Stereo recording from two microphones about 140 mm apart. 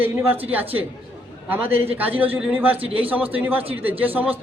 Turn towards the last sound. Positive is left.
turn(degrees=-10)  # may be behind; listen again after turning